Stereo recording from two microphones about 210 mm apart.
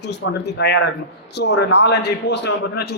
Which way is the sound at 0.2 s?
65° left (ahead or behind).